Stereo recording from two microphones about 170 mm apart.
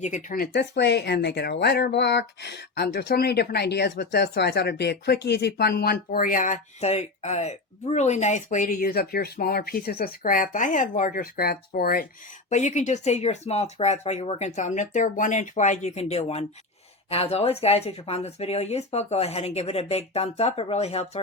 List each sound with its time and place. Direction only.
0.0 s speech: 50° left (ahead or behind)
0.5 s speech: 80° left; by 12.0 s 60° left (ahead or behind)
12.5 s speech: 45° left (ahead or behind)